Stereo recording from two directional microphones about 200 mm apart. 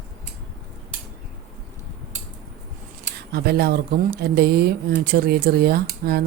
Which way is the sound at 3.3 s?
55° right (ahead or behind).